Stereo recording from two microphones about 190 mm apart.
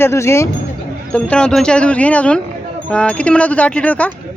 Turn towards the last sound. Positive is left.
turn(degrees=5)  # may be behind; listen again after turning